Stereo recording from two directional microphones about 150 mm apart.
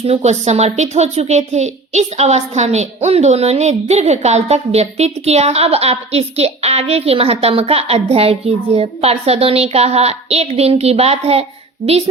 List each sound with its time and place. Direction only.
0.0 s speech: 45° right (ahead or behind)